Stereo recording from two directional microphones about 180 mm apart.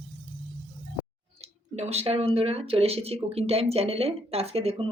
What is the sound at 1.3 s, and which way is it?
A woman's voice, 35° right (ahead or behind).